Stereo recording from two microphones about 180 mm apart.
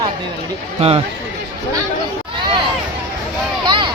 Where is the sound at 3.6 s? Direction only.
25° right (ahead or behind).